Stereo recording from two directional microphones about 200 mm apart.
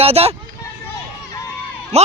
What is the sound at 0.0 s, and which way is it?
Speech, 30° right (ahead or behind).